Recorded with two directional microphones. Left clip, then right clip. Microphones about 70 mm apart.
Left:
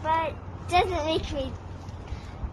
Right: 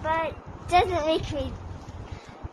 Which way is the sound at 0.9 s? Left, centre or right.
Right.